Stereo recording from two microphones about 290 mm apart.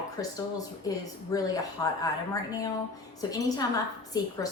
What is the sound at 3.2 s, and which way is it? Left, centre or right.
A woman's voice, centre.